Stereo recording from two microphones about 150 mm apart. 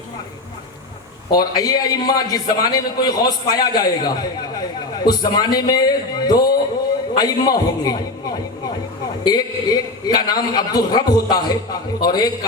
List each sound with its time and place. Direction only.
1.3 s a man's voice: 25° left (ahead or behind)
9.2 s a man's voice: 25° left (ahead or behind)